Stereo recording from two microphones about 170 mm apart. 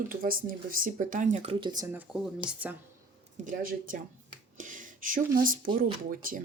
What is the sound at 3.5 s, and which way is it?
Speech, 55° right (ahead or behind).